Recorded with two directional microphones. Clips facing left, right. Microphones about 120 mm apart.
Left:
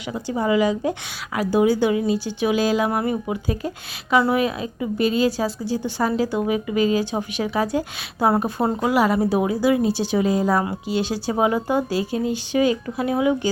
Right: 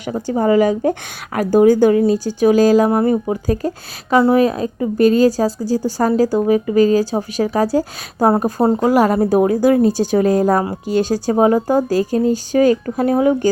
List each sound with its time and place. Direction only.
0.0 s a woman's voice: 45° right (ahead or behind)